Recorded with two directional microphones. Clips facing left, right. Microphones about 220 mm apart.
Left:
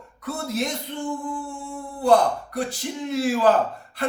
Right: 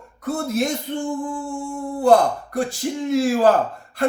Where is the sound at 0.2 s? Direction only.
50° right (ahead or behind).